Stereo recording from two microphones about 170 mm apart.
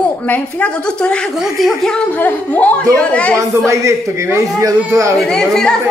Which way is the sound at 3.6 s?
15° right (ahead or behind).